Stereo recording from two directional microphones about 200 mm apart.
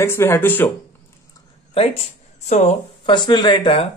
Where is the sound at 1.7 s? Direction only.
30° left (ahead or behind).